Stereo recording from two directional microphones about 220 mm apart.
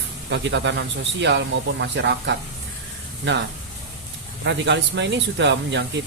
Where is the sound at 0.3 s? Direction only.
55° right (ahead or behind).